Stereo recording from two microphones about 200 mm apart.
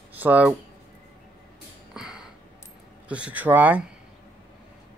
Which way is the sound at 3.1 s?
5° right (ahead or behind).